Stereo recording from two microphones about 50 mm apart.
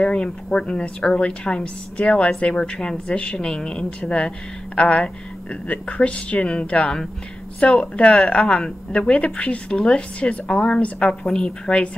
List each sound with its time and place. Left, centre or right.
0.0 s a woman's voice: left
9.7 s a woman's voice: centre